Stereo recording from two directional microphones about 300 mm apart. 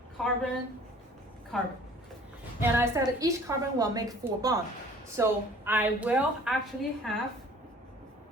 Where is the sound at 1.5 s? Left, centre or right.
Centre.